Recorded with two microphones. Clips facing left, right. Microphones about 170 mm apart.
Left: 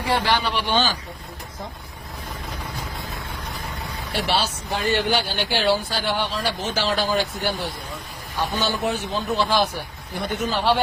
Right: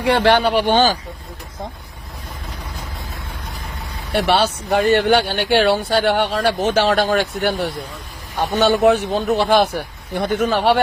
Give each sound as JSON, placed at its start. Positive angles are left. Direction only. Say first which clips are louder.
{"t": 0.0, "sound": "speech", "louder": "right 8 dB", "side_deg": -65}
{"t": 0.6, "sound": "speech", "louder": "right 7 dB", "side_deg": -45}
{"t": 4.1, "sound": "speech", "louder": "right 7 dB", "side_deg": -60}